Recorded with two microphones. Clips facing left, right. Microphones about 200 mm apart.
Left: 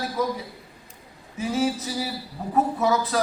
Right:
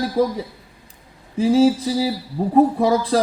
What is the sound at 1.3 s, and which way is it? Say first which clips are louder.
Speech: right 10 dB; 30° right (ahead or behind).